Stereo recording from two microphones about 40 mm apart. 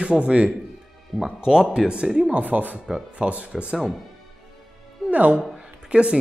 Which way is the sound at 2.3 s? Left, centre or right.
Right.